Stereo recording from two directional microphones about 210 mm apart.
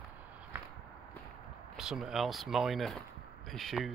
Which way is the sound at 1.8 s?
Centre (ahead or behind).